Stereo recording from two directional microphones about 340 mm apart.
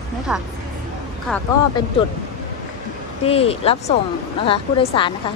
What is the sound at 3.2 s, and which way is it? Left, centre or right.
A woman's voice, centre.